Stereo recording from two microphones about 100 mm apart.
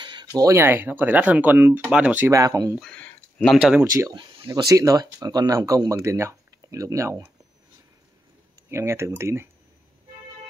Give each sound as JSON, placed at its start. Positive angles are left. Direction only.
{"t": 0.0, "sound": "a sound", "side_deg": -45}
{"t": 0.4, "sound": "speech", "side_deg": -30}
{"t": 0.7, "sound": "speech", "side_deg": -20}
{"t": 2.3, "sound": "speech", "side_deg": -35}
{"t": 2.8, "sound": "a sound", "side_deg": 15}
{"t": 3.5, "sound": "speech", "side_deg": -10}
{"t": 4.6, "sound": "speech", "side_deg": -35}
{"t": 8.6, "sound": "speech", "side_deg": -25}